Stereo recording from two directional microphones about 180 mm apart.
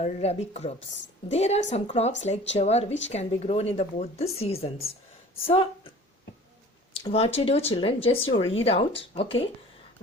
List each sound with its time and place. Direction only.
0.0 s speech: 35° left (ahead or behind)
6.9 s speech: 30° left (ahead or behind)